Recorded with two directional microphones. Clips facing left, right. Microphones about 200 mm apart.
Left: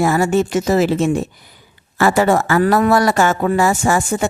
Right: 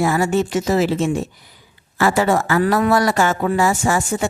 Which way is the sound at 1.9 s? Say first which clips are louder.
Left 3 dB; 50° left (ahead or behind).